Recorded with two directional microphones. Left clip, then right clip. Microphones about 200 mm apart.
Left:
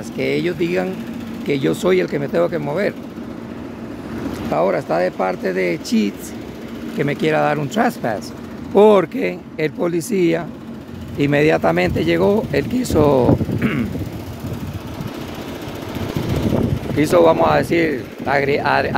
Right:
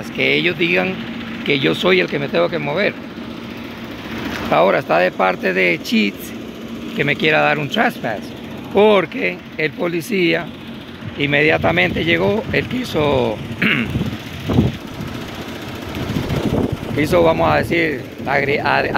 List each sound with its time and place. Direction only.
0.2 s speech: 15° left (ahead or behind)
4.5 s speech: 5° left (ahead or behind); by 13.3 s 25° left (ahead or behind)
13.6 s speech: 15° left (ahead or behind)
17.0 s speech: 25° left (ahead or behind)